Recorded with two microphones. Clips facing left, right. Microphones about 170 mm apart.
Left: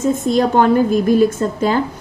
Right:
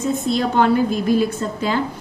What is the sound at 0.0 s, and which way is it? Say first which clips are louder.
Speech: left 5 dB; 45° left (ahead or behind).